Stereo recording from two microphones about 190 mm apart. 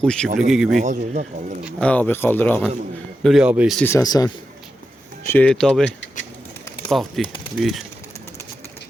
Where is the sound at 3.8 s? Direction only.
15° left (ahead or behind).